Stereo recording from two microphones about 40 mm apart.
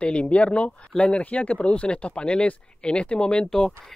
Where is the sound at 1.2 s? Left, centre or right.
Left.